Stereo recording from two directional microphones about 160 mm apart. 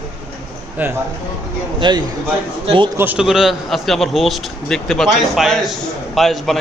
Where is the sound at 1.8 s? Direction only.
30° right (ahead or behind).